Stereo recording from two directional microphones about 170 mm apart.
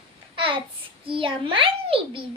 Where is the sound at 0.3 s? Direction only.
30° right (ahead or behind).